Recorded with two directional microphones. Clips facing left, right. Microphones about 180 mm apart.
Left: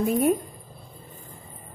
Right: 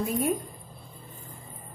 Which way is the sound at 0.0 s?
60° left (ahead or behind).